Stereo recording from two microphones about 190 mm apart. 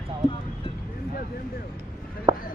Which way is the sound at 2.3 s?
25° right (ahead or behind).